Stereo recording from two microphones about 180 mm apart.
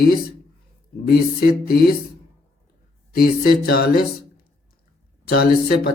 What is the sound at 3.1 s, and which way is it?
Speech, 55° left (ahead or behind).